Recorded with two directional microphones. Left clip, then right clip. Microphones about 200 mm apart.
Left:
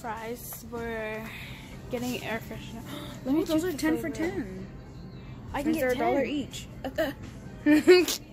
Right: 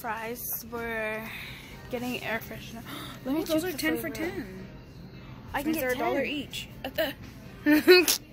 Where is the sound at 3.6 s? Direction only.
30° left (ahead or behind).